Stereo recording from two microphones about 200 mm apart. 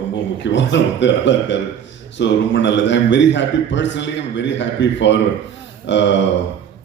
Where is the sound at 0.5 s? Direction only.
65° left (ahead or behind).